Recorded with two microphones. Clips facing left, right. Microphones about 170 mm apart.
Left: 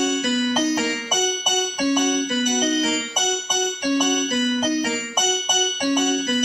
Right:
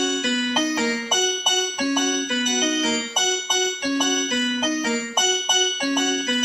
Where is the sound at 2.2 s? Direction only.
45° left (ahead or behind).